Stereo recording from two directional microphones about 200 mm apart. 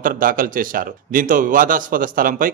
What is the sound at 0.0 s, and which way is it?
A man's voice, 45° right (ahead or behind).